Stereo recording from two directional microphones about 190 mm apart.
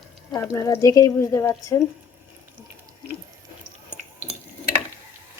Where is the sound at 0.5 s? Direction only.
15° left (ahead or behind).